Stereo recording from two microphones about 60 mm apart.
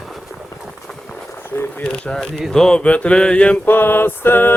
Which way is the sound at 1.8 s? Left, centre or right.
Centre.